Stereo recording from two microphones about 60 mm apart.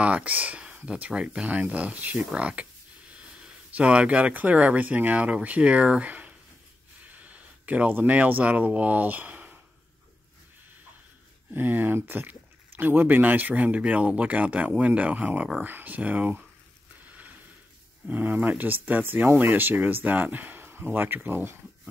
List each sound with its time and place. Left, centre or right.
0.0 s speech: right
11.5 s speech: right
17.0 s a sound: right
18.0 s speech: right